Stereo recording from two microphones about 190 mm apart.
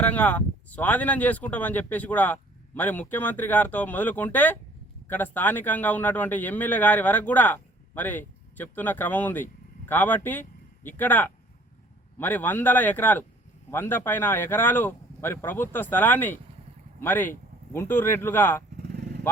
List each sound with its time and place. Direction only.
0.0 s a man's voice: 10° left (ahead or behind)
18.8 s vehicle: 60° right (ahead or behind)